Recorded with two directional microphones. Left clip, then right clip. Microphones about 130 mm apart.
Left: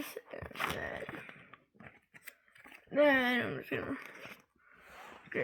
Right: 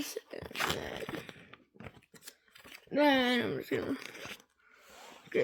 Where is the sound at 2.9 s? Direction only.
90° right; by 3.8 s 65° right (ahead or behind).